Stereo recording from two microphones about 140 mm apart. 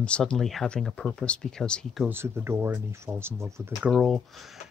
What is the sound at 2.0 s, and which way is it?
Speech, 15° right (ahead or behind).